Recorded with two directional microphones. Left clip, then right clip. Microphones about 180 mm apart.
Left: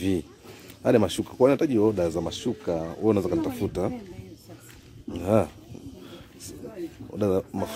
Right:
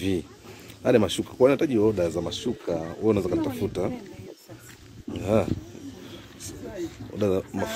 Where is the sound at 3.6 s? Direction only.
25° left (ahead or behind).